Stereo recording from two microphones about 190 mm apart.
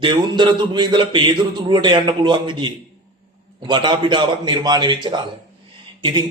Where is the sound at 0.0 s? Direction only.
25° right (ahead or behind).